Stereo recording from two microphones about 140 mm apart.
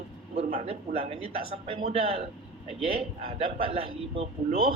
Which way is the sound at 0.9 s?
45° right (ahead or behind).